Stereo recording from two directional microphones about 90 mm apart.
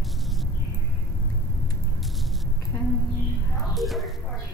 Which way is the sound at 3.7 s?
Centre (ahead or behind).